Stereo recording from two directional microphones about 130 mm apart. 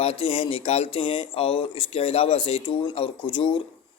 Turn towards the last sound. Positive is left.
turn(degrees=40)  # may be behind; listen again after turning